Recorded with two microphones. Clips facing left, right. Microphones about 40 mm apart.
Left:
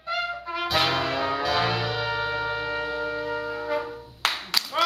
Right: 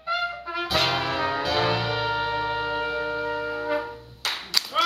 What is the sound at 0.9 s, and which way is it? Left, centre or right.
Music, centre.